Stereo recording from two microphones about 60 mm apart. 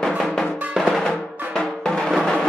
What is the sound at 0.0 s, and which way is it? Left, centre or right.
Drum, centre.